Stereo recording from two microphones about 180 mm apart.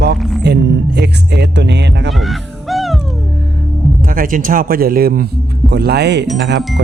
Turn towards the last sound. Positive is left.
turn(degrees=-75)  # may be behind; listen again after turning